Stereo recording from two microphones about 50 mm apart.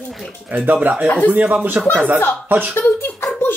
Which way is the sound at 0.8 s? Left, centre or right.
Right.